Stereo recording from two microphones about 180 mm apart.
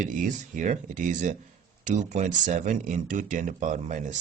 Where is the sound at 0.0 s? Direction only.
45° right (ahead or behind).